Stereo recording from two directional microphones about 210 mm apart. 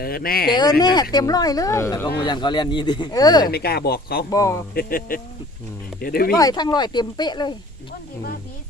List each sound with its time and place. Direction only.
0.0 s speech: 45° left (ahead or behind)
0.5 s speech: 20° left (ahead or behind)
3.5 s speech: 50° left (ahead or behind)
4.3 s speech: 15° left (ahead or behind)
4.7 s speech: 45° left (ahead or behind)
6.3 s speech: 20° left (ahead or behind)